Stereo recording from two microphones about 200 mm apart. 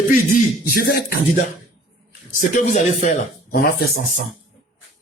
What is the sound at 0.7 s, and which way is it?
Speech, 50° left (ahead or behind).